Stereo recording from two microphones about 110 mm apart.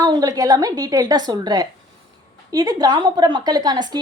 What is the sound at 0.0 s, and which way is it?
A woman's voice, 35° right (ahead or behind).